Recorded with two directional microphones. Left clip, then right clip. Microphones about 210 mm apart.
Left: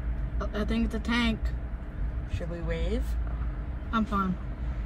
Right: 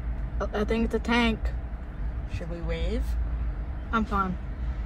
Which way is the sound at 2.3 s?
25° left (ahead or behind).